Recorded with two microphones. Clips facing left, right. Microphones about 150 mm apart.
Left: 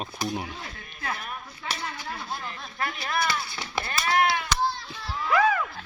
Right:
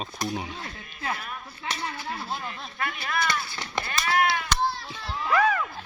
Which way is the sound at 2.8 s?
30° left (ahead or behind).